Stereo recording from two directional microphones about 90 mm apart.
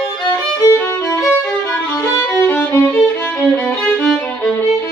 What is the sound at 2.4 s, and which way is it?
Violin, 25° left (ahead or behind).